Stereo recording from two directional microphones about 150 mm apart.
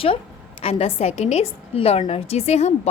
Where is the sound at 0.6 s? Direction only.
40° left (ahead or behind).